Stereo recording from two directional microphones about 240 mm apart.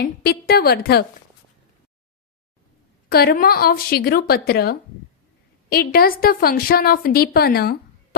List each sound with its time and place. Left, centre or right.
0.0 s a woman's voice: left
3.1 s a woman's voice: left